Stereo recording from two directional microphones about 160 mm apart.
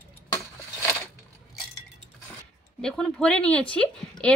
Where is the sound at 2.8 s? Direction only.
5° left (ahead or behind).